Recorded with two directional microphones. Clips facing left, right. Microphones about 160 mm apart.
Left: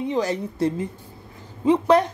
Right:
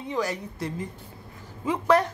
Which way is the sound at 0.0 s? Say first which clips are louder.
Left 5 dB; 25° left (ahead or behind).